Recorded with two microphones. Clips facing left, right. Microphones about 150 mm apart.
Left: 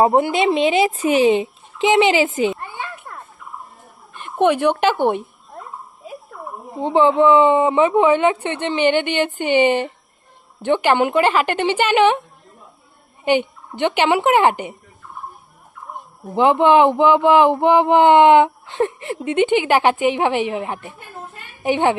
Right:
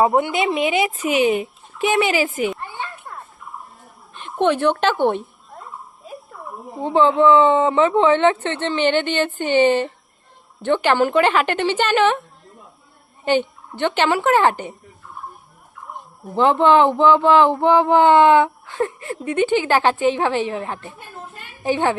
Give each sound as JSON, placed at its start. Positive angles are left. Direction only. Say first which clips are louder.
{"t": 0.0, "sound": "speech", "louder": "left 2 dB", "side_deg": 30}
{"t": 4.4, "sound": "speech", "louder": "left 2 dB", "side_deg": 15}
{"t": 6.8, "sound": "speech", "louder": "left 1 dB", "side_deg": 15}
{"t": 13.2, "sound": "speech", "louder": "left 1 dB", "side_deg": 15}
{"t": 16.3, "sound": "speech", "louder": "left 1 dB", "side_deg": 15}